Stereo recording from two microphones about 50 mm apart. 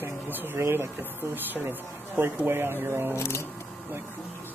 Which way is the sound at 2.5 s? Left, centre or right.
Right.